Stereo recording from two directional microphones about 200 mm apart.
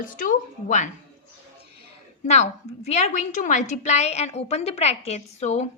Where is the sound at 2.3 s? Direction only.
35° left (ahead or behind).